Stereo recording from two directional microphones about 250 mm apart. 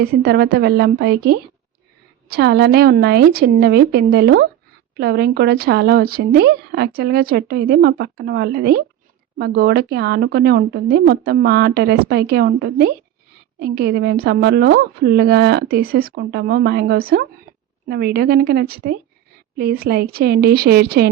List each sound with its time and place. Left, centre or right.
0.0 s a woman's voice: right